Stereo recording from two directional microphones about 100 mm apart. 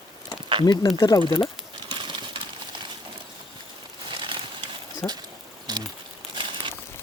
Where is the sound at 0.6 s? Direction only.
45° left (ahead or behind).